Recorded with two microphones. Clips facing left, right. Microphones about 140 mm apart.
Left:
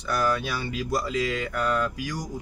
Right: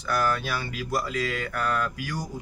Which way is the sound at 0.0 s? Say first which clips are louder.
Left 1 dB; 20° left (ahead or behind).